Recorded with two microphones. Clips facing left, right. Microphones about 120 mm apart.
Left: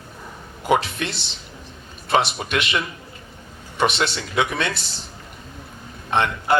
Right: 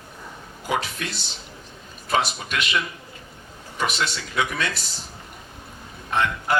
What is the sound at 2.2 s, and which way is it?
Speech, 70° left (ahead or behind).